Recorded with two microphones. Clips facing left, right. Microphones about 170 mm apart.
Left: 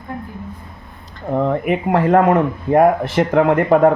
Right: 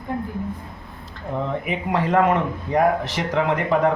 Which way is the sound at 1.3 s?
55° left (ahead or behind).